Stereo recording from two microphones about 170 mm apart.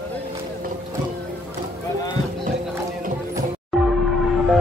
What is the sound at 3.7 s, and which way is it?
Music, centre (ahead or behind).